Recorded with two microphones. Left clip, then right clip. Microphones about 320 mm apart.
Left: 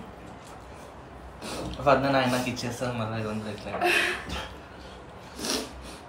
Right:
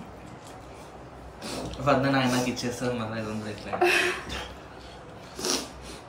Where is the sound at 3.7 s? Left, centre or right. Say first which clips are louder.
Right 1 dB; centre.